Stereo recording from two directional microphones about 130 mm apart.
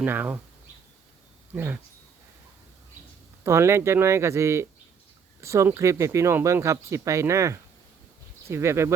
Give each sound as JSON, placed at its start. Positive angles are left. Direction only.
{"t": 0.0, "sound": "speech", "side_deg": -15}
{"t": 1.5, "sound": "speech", "side_deg": -15}
{"t": 3.4, "sound": "speech", "side_deg": -20}